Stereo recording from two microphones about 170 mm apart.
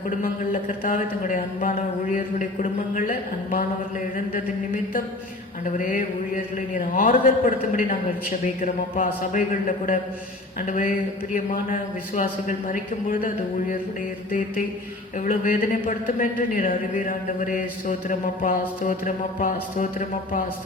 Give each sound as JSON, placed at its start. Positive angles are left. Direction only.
{"t": 0.2, "sound": "speech", "side_deg": 50}
{"t": 9.3, "sound": "speech", "side_deg": 50}
{"t": 15.2, "sound": "speech", "side_deg": 50}